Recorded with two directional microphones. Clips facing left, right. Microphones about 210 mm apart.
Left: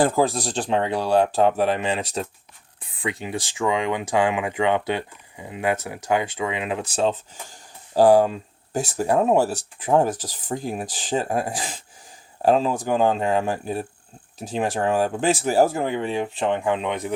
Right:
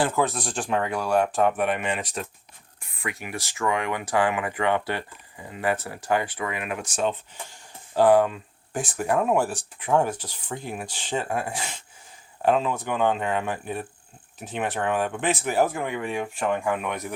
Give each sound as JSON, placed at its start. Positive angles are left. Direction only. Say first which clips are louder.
{"t": 0.0, "sound": "speech", "louder": "left 4 dB", "side_deg": 35}
{"t": 10.1, "sound": "speech", "louder": "left 4 dB", "side_deg": 90}
{"t": 10.5, "sound": "speech", "louder": "left 5 dB", "side_deg": 35}